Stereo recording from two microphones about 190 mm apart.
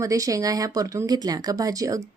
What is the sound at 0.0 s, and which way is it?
Speech, 15° right (ahead or behind).